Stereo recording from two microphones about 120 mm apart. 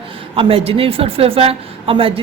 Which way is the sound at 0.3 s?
50° right (ahead or behind).